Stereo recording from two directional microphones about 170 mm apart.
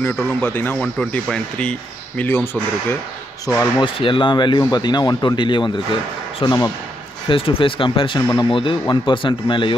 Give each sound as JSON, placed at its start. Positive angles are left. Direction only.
{"t": 0.4, "sound": "speech", "side_deg": 10}
{"t": 3.4, "sound": "speech", "side_deg": 25}